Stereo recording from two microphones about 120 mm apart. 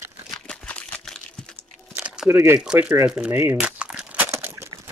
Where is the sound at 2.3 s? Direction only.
20° right (ahead or behind).